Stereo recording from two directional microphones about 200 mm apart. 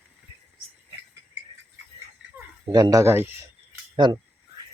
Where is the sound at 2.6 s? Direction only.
20° right (ahead or behind).